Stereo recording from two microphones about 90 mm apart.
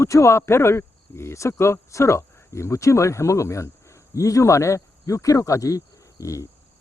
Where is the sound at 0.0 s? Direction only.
35° left (ahead or behind).